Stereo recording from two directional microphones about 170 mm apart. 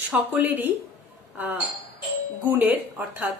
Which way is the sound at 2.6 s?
10° right (ahead or behind).